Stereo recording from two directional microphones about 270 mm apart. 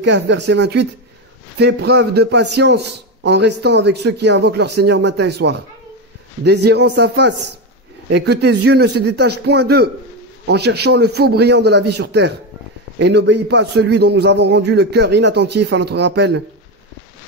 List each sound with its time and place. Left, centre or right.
0.0 s a man's voice: right